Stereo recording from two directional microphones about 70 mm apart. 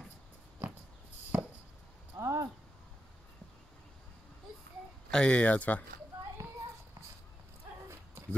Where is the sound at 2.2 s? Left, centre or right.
Right.